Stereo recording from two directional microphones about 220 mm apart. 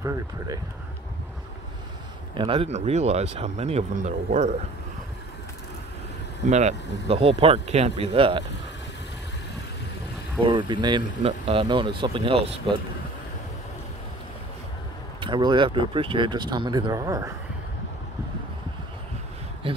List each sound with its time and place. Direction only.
0.0 s speech: 15° right (ahead or behind)
2.3 s speech: 25° right (ahead or behind)
6.4 s speech: 30° right (ahead or behind)
10.4 s speech: 20° right (ahead or behind)
15.1 s speech: 20° right (ahead or behind)